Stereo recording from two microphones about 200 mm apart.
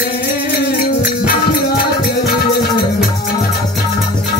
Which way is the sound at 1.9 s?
50° left (ahead or behind).